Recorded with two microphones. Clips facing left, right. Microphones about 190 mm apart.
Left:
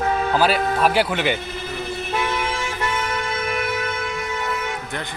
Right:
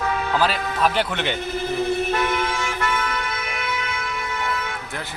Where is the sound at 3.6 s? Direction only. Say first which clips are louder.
Left 4 dB; 40° left (ahead or behind).